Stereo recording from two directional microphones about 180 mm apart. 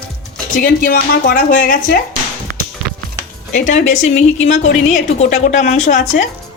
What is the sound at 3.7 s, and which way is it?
A woman's voice, 45° left (ahead or behind).